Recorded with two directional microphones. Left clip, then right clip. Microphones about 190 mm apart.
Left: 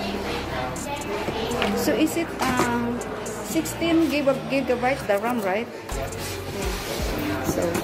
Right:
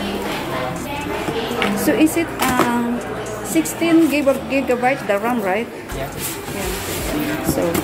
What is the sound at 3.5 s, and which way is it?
A woman's voice, 5° right (ahead or behind).